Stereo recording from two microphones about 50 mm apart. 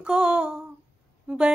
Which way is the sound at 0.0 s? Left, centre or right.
Centre.